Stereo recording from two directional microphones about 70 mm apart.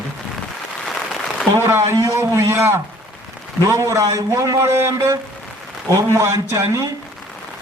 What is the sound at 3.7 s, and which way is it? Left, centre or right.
A man's voice, right.